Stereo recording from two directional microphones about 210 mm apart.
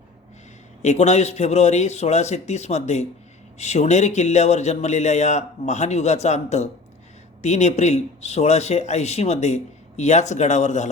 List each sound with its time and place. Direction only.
0.8 s a man's voice: 35° left (ahead or behind)